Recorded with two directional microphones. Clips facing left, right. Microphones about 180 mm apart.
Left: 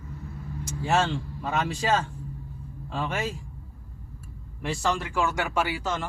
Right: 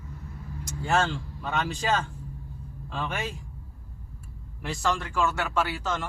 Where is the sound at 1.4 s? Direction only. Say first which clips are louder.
Left 1 dB; 5° left (ahead or behind).